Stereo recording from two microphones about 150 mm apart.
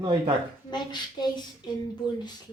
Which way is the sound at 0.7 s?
30° left (ahead or behind).